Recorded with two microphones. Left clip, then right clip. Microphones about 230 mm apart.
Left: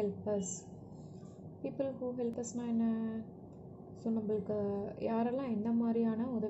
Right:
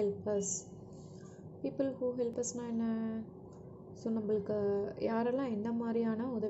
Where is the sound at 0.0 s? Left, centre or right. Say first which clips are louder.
Right 2 dB; centre.